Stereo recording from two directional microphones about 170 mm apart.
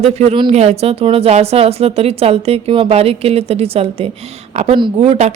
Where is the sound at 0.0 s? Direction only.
40° right (ahead or behind).